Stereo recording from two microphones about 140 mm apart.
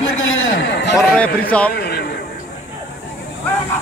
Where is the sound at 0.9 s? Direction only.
10° left (ahead or behind).